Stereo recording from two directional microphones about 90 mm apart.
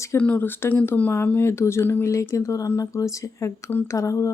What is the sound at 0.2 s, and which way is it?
Speech, 20° left (ahead or behind).